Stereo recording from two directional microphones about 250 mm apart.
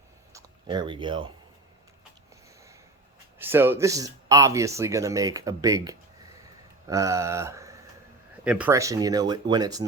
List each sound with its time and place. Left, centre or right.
0.3 s speech: centre
3.3 s speech: centre